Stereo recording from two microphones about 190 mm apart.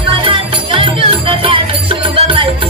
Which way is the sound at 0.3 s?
30° right (ahead or behind).